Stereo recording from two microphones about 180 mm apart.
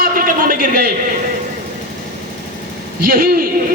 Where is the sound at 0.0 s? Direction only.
50° right (ahead or behind).